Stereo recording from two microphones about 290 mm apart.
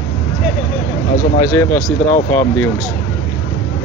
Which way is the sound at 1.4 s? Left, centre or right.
Centre.